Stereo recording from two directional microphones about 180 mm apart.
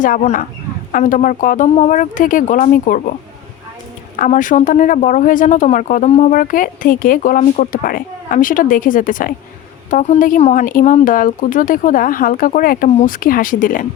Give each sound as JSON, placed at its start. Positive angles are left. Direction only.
{"t": 0.0, "sound": "speech", "side_deg": 45}
{"t": 4.2, "sound": "speech", "side_deg": 45}